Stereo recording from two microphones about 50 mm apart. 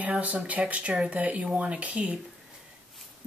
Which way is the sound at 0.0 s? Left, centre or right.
Right.